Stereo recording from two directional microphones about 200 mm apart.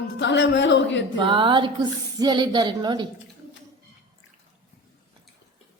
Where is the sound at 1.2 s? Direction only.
25° right (ahead or behind).